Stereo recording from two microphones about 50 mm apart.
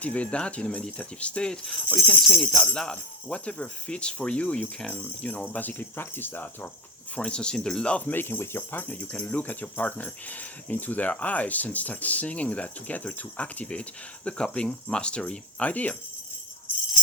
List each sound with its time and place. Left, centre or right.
0.0 s speech: left
5.5 s speech: left
7.2 s speech: left
8.0 s speech: left
8.9 s speech: left